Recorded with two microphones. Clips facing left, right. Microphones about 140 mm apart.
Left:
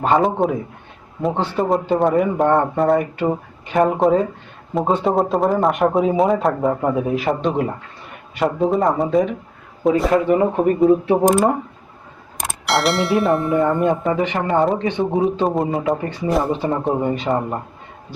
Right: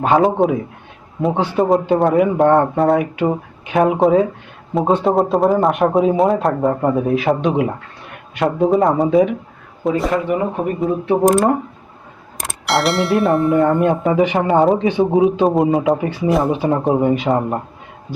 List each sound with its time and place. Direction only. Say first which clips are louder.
0.0 s a man's voice: right 3 dB; centre (ahead or behind)
14.2 s a man's voice: right 4 dB; 15° right (ahead or behind)